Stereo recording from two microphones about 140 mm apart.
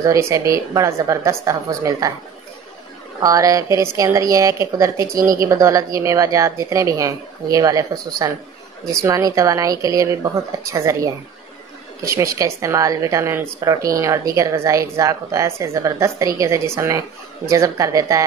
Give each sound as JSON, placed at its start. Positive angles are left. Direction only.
{"t": 0.0, "sound": "a woman's voice", "side_deg": -20}
{"t": 3.2, "sound": "a woman's voice", "side_deg": -25}